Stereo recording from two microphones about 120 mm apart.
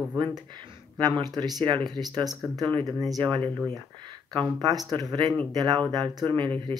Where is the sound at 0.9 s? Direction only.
40° right (ahead or behind).